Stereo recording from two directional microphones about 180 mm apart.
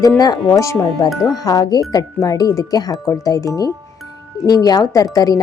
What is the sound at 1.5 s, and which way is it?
Speech, 20° left (ahead or behind).